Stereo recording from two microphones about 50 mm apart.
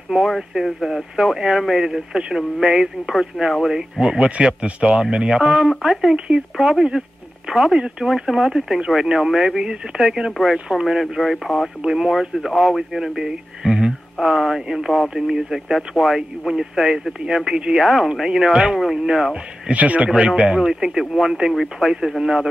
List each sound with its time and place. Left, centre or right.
0.3 s speech: centre
2.1 s speech: centre
4.5 s speech: right; by 6.1 s centre
6.1 s speech: centre
6.5 s speech: centre
11.8 s speech: centre
17.6 s speech: centre
17.8 s speech: centre
19.7 s speech: right
20.4 s speech: centre